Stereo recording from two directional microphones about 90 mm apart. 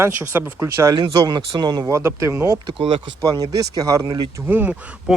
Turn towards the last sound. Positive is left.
turn(degrees=-5)  # may be behind; listen again after turning